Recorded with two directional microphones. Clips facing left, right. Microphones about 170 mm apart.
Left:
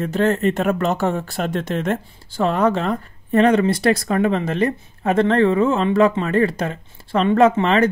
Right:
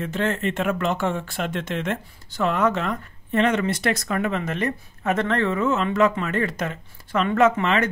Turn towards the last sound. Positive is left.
turn(degrees=30)  # may be behind; listen again after turning